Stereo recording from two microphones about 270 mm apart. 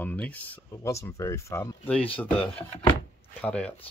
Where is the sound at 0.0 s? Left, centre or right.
Centre.